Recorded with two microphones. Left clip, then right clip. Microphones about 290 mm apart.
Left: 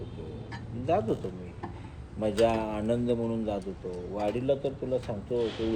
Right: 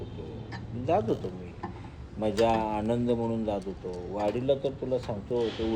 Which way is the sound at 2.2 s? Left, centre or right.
Centre.